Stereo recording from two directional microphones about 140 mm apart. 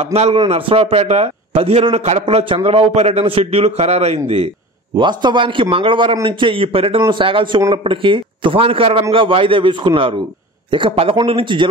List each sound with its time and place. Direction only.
0.0 s a man's voice: 50° right (ahead or behind)
4.9 s a man's voice: 35° right (ahead or behind)